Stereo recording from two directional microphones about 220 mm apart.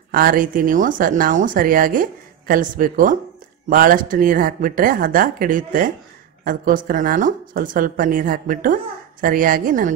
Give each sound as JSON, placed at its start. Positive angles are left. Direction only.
{"t": 0.1, "sound": "speech", "side_deg": -40}